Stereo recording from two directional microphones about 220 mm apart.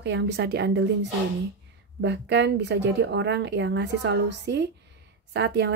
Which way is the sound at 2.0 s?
50° right (ahead or behind).